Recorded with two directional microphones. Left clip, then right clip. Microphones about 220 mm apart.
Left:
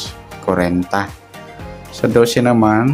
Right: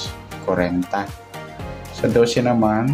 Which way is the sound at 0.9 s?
25° left (ahead or behind).